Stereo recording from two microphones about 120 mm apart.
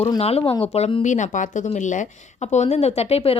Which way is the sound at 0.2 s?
55° left (ahead or behind).